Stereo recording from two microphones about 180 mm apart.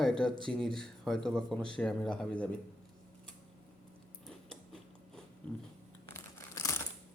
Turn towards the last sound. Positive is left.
turn(degrees=15)  # may be behind; listen again after turning